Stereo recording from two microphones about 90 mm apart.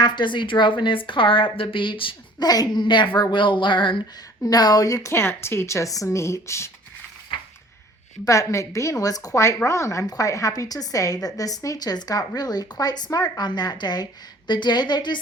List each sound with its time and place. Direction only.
0.0 s a woman's voice: 60° left (ahead or behind)
2.4 s a woman's voice: 45° left (ahead or behind); by 4.0 s 70° left (ahead or behind)
4.4 s a woman's voice: 45° left (ahead or behind)
5.1 s a woman's voice: 30° left (ahead or behind)
8.2 s a woman's voice: 35° left (ahead or behind); by 15.2 s 55° left (ahead or behind)